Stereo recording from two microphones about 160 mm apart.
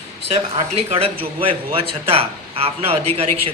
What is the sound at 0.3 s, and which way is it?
Speech, 40° right (ahead or behind).